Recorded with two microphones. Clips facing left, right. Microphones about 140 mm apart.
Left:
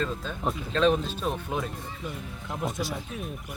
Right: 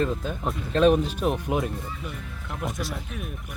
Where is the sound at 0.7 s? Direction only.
10° right (ahead or behind).